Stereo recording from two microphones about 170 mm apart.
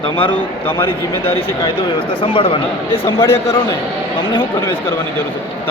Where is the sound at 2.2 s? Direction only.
30° left (ahead or behind).